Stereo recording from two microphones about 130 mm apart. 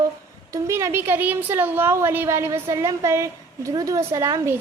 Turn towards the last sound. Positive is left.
turn(degrees=-20)  # may be behind; listen again after turning